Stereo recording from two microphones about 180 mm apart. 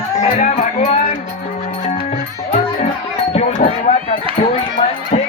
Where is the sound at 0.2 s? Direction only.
40° left (ahead or behind).